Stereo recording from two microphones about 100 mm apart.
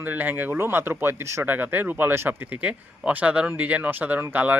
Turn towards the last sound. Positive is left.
turn(degrees=-15)  # may be behind; listen again after turning